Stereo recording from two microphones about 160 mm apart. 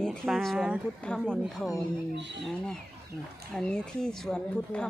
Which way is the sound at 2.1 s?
90° right.